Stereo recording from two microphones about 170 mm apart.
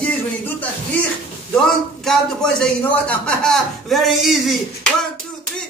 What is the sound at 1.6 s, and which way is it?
A man's voice, 5° left (ahead or behind).